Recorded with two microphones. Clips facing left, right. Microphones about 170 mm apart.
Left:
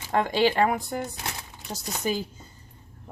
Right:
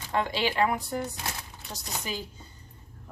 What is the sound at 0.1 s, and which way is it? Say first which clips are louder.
Speech: left 6 dB; 50° left (ahead or behind).